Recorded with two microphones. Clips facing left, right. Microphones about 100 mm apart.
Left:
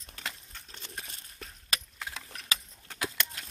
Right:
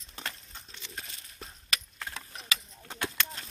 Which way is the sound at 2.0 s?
5° left (ahead or behind).